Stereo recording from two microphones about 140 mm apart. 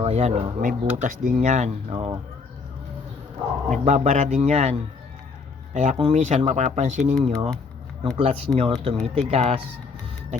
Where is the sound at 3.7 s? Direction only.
55° right (ahead or behind).